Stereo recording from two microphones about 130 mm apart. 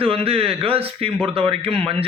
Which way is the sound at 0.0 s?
50° right (ahead or behind).